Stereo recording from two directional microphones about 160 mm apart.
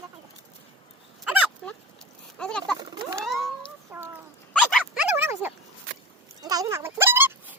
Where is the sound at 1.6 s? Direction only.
Centre (ahead or behind).